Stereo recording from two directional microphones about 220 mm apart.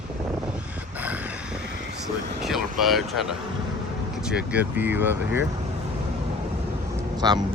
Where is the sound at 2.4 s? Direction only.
Centre (ahead or behind).